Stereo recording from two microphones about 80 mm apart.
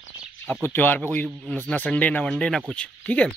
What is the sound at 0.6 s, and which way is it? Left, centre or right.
Speech, left.